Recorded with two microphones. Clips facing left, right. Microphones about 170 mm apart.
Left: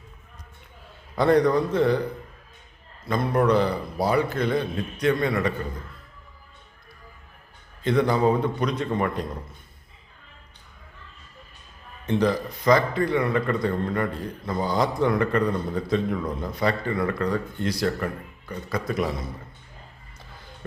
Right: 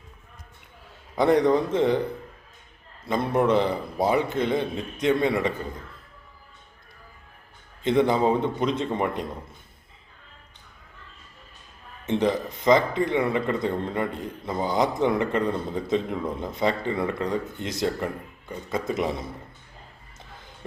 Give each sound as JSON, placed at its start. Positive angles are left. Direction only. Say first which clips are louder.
{"t": 1.1, "sound": "a man's voice", "louder": "even", "side_deg": -20}
{"t": 3.1, "sound": "a man's voice", "louder": "left 1 dB", "side_deg": -25}
{"t": 7.9, "sound": "a man's voice", "louder": "even", "side_deg": -20}
{"t": 12.0, "sound": "a man's voice", "louder": "left 1 dB", "side_deg": -20}